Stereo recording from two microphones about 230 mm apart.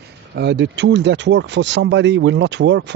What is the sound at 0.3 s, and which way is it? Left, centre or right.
Speech, right.